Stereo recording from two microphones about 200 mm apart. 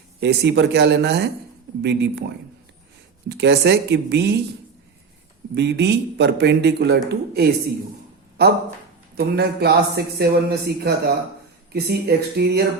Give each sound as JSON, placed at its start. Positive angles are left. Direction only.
{"t": 0.2, "sound": "a man's voice", "side_deg": -60}
{"t": 3.2, "sound": "a man's voice", "side_deg": -60}
{"t": 5.5, "sound": "a man's voice", "side_deg": -55}